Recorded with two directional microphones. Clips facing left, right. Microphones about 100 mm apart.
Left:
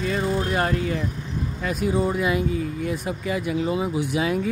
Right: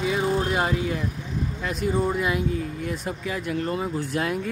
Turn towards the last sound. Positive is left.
turn(degrees=10)  # may be behind; listen again after turning